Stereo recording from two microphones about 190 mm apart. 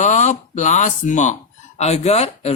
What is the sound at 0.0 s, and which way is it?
Speech, 40° left (ahead or behind).